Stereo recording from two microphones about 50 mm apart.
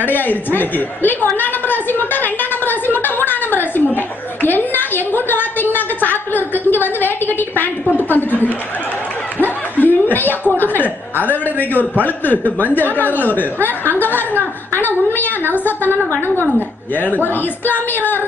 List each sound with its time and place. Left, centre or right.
0.0 s a woman's voice: left
6.0 s a sound: left
8.0 s a woman's voice: left
9.4 s chuckle: left
10.6 s a woman's voice: left